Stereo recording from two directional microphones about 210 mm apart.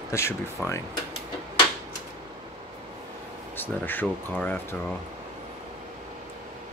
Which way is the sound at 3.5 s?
10° left (ahead or behind).